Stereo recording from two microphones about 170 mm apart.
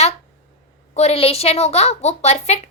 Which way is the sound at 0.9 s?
35° left (ahead or behind).